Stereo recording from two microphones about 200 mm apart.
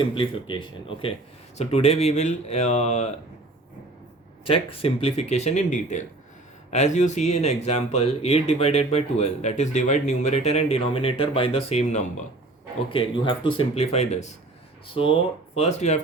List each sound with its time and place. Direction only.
0.0 s speech: 25° left (ahead or behind)
4.4 s speech: 30° left (ahead or behind)